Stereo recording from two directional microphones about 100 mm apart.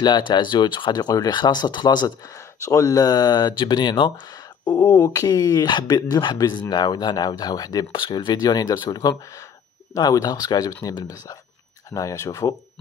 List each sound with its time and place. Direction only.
0.0 s speech: 50° left (ahead or behind)
7.9 s speech: 50° left (ahead or behind); by 12.5 s 35° left (ahead or behind)